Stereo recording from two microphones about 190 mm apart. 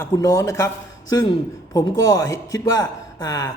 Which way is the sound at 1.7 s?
20° left (ahead or behind).